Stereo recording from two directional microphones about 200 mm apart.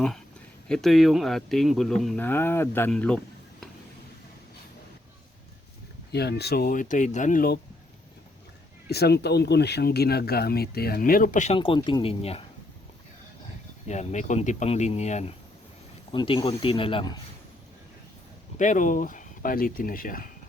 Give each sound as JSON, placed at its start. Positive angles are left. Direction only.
{"t": 0.7, "sound": "speech", "side_deg": 0}
{"t": 6.1, "sound": "speech", "side_deg": 55}
{"t": 8.9, "sound": "speech", "side_deg": 55}
{"t": 13.8, "sound": "speech", "side_deg": 35}
{"t": 18.6, "sound": "speech", "side_deg": 40}